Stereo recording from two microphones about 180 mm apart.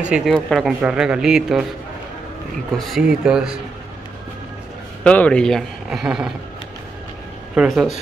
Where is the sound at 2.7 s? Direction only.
Centre (ahead or behind).